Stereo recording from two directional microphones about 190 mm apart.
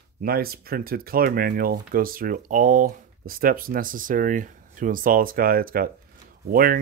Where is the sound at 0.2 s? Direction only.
50° right (ahead or behind).